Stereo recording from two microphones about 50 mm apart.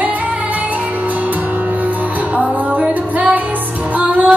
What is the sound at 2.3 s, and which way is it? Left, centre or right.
Music, right.